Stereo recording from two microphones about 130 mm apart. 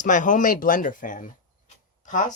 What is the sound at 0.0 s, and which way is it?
Speech, 80° left.